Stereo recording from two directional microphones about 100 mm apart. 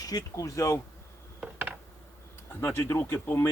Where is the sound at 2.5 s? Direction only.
20° left (ahead or behind).